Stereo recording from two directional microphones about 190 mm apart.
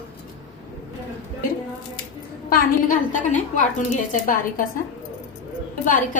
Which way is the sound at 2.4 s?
40° left (ahead or behind).